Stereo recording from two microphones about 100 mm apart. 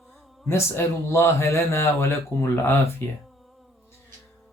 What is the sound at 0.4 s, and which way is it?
Speech, 25° left (ahead or behind).